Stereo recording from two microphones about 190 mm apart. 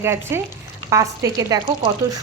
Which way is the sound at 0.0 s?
15° right (ahead or behind).